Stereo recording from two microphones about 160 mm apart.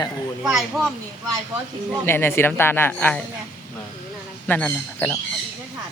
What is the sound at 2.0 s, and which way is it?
Speech, 15° left (ahead or behind).